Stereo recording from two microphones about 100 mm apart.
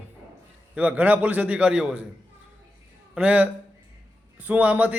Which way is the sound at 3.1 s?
15° right (ahead or behind).